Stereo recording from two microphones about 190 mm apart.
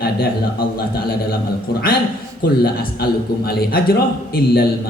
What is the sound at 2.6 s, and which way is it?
A man's voice, 55° left (ahead or behind).